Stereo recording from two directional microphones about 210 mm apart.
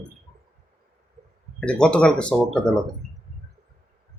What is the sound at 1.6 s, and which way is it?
Speech, 5° left (ahead or behind).